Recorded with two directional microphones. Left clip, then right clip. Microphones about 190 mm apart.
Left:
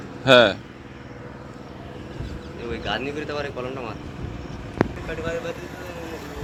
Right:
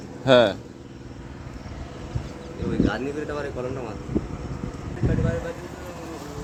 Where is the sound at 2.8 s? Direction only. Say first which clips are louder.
Even; 55° right (ahead or behind).